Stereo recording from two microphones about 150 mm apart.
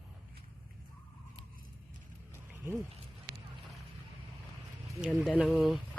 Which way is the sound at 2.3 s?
20° right (ahead or behind).